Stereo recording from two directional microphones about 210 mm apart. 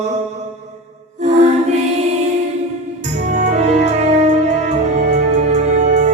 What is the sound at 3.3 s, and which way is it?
Music, 35° right (ahead or behind).